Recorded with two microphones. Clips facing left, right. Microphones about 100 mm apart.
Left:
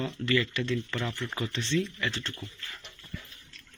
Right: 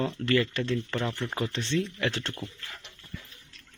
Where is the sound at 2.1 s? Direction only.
75° right (ahead or behind).